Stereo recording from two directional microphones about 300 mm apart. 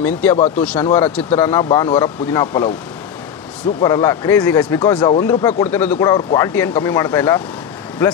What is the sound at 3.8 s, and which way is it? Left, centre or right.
Speech, centre.